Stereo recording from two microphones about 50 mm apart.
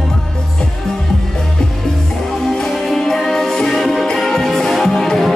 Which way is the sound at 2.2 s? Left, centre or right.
Centre.